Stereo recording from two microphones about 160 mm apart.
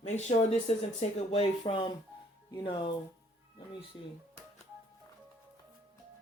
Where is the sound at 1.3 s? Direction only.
35° left (ahead or behind).